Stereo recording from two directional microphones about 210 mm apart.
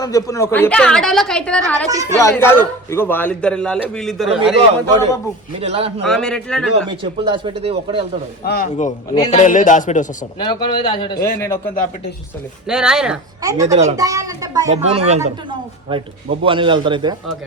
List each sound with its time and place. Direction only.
0.0 s a woman's voice: 15° left (ahead or behind)
1.9 s speech: 15° right (ahead or behind)
2.1 s a man's voice: 10° left (ahead or behind)
5.5 s a man's voice: 30° right (ahead or behind)
6.1 s a woman's voice: 5° left (ahead or behind)
6.8 s a man's voice: 25° right (ahead or behind)
8.4 s a man's voice: 50° left (ahead or behind)
9.3 s a man's voice: 35° left (ahead or behind)
10.4 s a man's voice: 20° left (ahead or behind)
11.3 s a man's voice: 10° left (ahead or behind)
12.6 s a woman's voice: 5° right (ahead or behind)
13.4 s speech: 15° right (ahead or behind)
14.7 s a man's voice: 30° right (ahead or behind)